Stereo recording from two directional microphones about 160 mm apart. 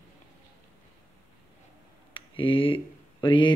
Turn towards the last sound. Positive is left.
turn(degrees=30)  # may be behind; listen again after turning